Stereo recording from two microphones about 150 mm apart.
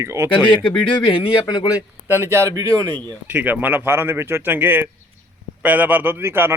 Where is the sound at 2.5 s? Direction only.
25° right (ahead or behind).